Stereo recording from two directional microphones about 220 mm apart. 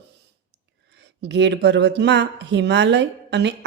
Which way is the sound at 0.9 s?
50° right (ahead or behind).